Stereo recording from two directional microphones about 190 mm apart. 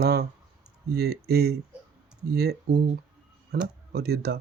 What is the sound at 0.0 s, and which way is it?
Speech, 55° right (ahead or behind).